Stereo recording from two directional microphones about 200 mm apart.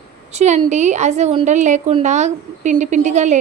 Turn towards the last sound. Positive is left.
turn(degrees=-35)  # may be behind; listen again after turning